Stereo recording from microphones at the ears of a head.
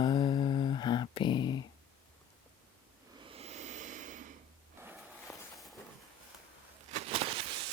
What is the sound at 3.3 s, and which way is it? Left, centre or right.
Snort, right.